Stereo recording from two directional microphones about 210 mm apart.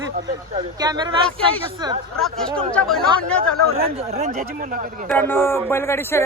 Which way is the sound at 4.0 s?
30° right (ahead or behind).